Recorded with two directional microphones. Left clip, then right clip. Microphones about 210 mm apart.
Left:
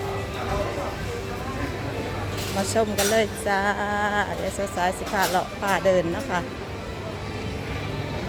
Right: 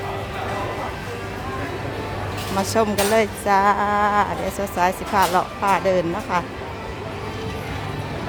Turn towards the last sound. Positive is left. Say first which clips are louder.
# right 2 dB
turn(degrees=-15)  # may be behind; listen again after turning